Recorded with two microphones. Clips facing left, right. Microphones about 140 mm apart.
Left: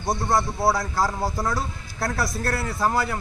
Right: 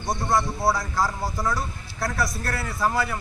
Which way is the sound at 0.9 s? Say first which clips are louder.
Left 2 dB; 30° left (ahead or behind).